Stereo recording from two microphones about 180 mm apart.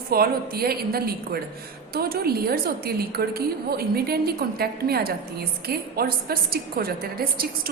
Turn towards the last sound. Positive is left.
turn(degrees=-55)  # may be behind; listen again after turning